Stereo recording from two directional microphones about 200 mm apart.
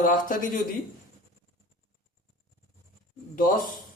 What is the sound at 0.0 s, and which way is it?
Speech, 45° left (ahead or behind).